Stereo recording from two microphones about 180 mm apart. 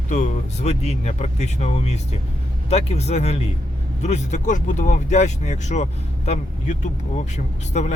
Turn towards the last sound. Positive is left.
turn(degrees=40)  # may be behind; listen again after turning